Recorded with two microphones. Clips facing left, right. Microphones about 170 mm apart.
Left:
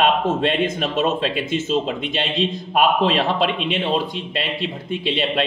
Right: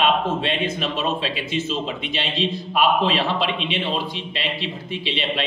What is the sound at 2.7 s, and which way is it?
Speech, 50° left (ahead or behind).